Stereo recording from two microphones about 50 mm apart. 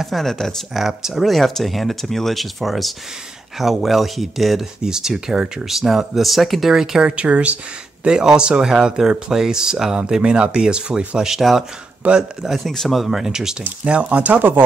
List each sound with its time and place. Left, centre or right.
0.0 s speech: centre
0.7 s speech: centre
6.7 s speech: centre
7.1 s speech: right
8.0 s speech: centre
11.2 s speech: centre
12.0 s speech: right
12.4 s speech: centre
13.8 s speech: right